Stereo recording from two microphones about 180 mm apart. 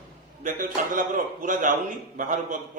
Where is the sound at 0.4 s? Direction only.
45° right (ahead or behind).